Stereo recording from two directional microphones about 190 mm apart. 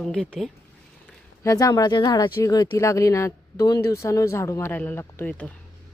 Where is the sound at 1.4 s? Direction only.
20° left (ahead or behind).